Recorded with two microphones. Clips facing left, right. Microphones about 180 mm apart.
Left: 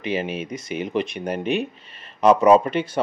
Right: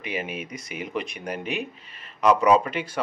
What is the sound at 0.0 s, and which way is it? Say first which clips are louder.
Speech: left 6 dB; 30° left (ahead or behind).